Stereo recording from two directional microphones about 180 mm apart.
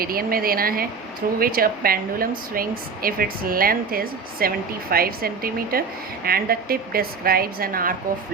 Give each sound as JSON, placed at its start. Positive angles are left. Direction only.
{"t": 0.0, "sound": "speech", "side_deg": -55}